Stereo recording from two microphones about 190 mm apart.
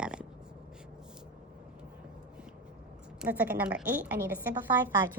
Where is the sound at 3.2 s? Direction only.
10° right (ahead or behind).